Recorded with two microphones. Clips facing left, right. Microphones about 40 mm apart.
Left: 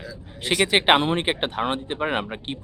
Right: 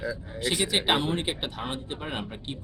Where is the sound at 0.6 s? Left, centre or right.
Left.